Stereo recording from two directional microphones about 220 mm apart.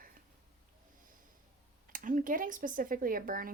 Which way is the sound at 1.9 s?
35° right (ahead or behind).